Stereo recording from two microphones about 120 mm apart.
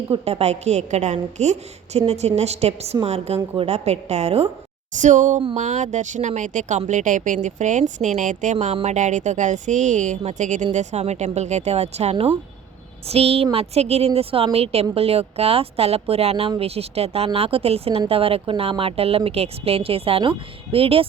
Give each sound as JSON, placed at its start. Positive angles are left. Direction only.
{"t": 0.1, "sound": "a woman's voice", "side_deg": -60}
{"t": 4.9, "sound": "a woman's voice", "side_deg": -90}